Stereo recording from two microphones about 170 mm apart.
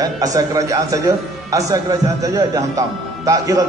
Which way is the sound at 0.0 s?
20° right (ahead or behind).